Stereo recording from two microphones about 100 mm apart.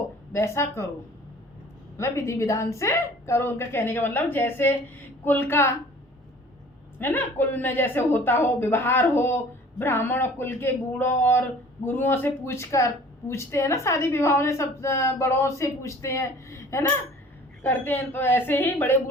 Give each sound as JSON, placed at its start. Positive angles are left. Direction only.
{"t": 0.3, "sound": "speech", "side_deg": 30}
{"t": 2.0, "sound": "speech", "side_deg": 30}
{"t": 7.0, "sound": "speech", "side_deg": 20}